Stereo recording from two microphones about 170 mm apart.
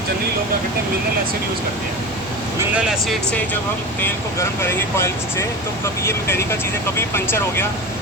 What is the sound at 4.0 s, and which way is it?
Speech, 15° left (ahead or behind).